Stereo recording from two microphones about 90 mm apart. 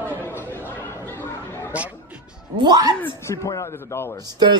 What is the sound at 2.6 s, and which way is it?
Speech, 50° right (ahead or behind).